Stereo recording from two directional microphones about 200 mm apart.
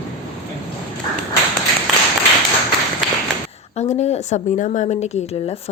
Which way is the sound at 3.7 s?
35° left (ahead or behind).